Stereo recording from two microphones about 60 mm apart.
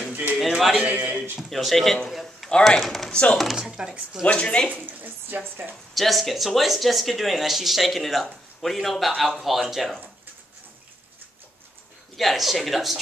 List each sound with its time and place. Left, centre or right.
0.4 s speech: centre
0.8 s a man's voice: centre
1.5 s speech: centre
2.0 s a sound: centre
2.8 s speech: centre
3.1 s speech: centre
3.3 s speech: centre
4.3 s speech: centre
4.8 s a woman's voice: right
5.9 s speech: centre
12.2 s speech: centre